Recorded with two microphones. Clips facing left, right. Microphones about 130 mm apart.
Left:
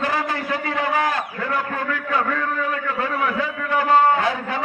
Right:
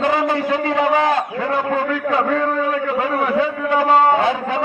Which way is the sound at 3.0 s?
20° right (ahead or behind).